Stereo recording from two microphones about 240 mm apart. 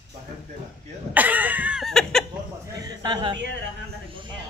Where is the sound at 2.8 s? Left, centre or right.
Centre.